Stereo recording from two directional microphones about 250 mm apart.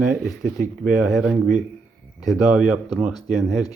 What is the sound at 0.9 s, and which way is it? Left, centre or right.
Speech, centre.